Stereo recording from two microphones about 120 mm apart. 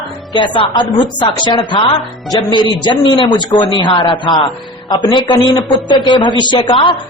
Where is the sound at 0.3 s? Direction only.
40° left (ahead or behind).